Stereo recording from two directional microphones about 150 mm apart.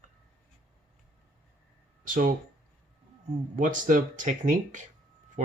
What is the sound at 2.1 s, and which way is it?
Speech, 65° right (ahead or behind).